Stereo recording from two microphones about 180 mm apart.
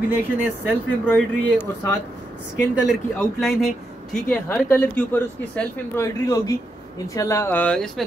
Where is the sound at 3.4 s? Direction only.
Centre (ahead or behind).